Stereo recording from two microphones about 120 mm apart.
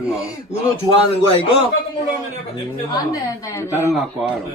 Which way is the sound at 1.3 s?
50° left (ahead or behind).